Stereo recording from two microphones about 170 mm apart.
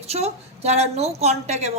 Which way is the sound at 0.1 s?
40° right (ahead or behind).